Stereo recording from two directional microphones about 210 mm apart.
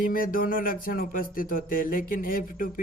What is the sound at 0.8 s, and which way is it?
Speech, 40° left (ahead or behind).